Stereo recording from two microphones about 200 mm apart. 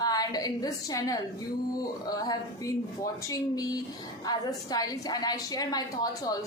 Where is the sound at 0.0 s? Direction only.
20° left (ahead or behind).